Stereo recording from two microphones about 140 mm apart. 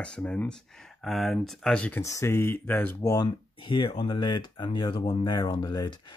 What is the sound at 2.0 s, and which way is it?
Speech, 20° left (ahead or behind).